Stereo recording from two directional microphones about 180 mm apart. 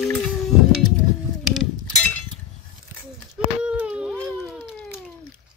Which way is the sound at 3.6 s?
5° right (ahead or behind).